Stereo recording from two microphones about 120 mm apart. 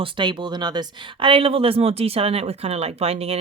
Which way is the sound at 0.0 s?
40° right (ahead or behind).